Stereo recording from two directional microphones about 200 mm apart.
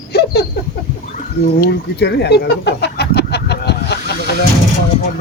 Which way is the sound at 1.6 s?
55° left (ahead or behind).